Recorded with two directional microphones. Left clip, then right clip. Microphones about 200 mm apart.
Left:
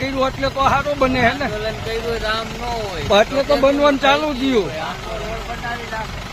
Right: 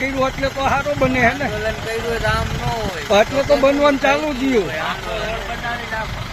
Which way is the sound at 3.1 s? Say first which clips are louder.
Even; 10° left (ahead or behind).